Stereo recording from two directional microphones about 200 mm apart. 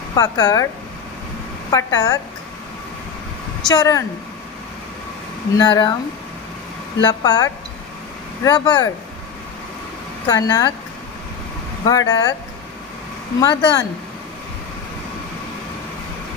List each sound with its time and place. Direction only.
0.1 s speech: 15° left (ahead or behind)
1.7 s speech: 15° left (ahead or behind)
3.6 s speech: 15° left (ahead or behind)
5.6 s speech: 20° left (ahead or behind)
7.1 s speech: 20° left (ahead or behind)
10.2 s speech: 20° left (ahead or behind)
11.8 s speech: 15° left (ahead or behind)
13.4 s speech: 20° left (ahead or behind)